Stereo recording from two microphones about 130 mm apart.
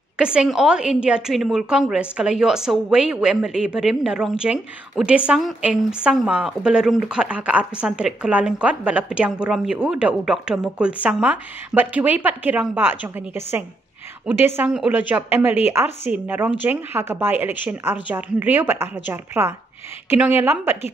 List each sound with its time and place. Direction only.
0.2 s a woman's voice: 5° right (ahead or behind)